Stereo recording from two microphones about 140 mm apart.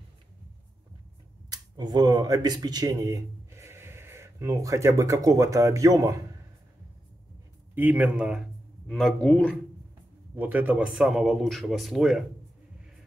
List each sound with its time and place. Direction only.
1.5 s speech: 30° right (ahead or behind)
7.7 s speech: 15° right (ahead or behind); by 9.6 s 10° left (ahead or behind)
10.3 s a man's voice: 15° right (ahead or behind)